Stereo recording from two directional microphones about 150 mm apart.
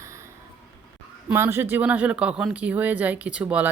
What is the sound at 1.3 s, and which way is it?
Speech, 15° right (ahead or behind).